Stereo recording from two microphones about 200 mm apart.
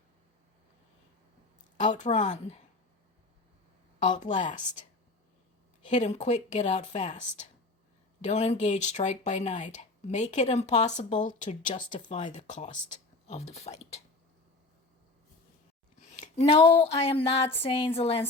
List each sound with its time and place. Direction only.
1.8 s speech: 35° left (ahead or behind)
4.2 s speech: 35° left (ahead or behind)
5.9 s speech: 35° left (ahead or behind)
16.0 s a sound: 35° left (ahead or behind)